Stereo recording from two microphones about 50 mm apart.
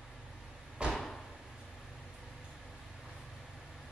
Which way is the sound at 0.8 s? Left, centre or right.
Centre.